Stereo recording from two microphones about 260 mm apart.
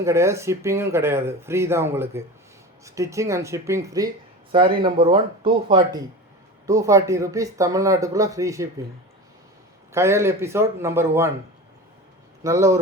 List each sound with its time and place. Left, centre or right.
0.0 s speech: centre
9.9 s speech: centre
12.4 s a man's voice: centre